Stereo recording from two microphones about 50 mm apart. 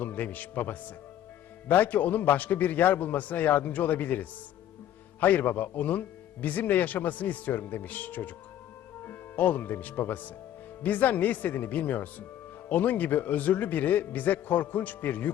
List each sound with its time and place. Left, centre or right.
0.0 s speech: left